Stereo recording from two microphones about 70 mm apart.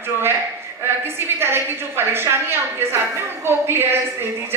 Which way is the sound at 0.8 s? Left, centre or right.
Right.